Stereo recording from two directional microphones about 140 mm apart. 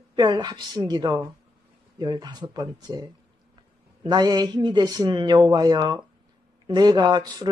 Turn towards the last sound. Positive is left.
turn(degrees=-30)  # may be behind; listen again after turning